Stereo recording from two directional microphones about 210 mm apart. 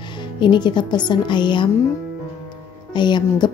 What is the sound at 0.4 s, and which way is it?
Speech, 20° left (ahead or behind).